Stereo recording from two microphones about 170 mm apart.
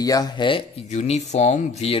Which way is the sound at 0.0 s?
20° left (ahead or behind).